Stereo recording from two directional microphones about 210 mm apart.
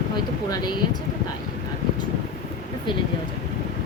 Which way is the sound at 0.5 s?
20° left (ahead or behind).